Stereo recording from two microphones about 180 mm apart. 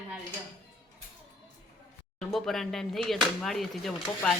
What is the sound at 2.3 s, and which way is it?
A man's voice, centre (ahead or behind).